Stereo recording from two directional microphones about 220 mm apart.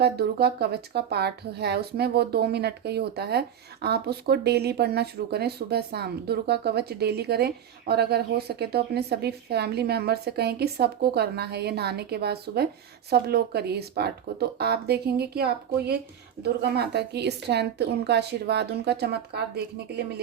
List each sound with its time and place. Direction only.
0.0 s speech: 45° right (ahead or behind)